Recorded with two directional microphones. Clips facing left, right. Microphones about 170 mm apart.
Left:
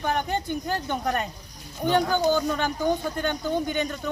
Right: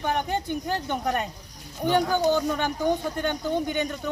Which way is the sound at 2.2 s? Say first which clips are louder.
Even; 25° right (ahead or behind).